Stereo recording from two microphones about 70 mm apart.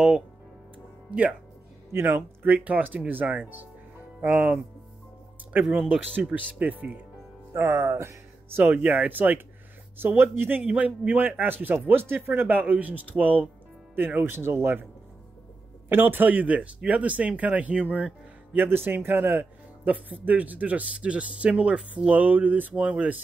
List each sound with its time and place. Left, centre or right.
1.9 s speech: right
2.4 s speech: right
7.5 s speech: right
15.9 s speech: right